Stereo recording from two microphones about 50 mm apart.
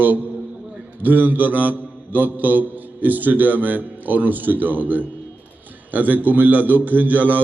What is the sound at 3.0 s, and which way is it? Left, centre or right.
A man's voice, right.